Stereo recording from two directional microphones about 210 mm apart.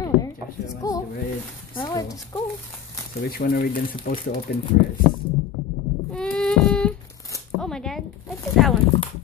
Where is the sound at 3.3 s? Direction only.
45° left (ahead or behind).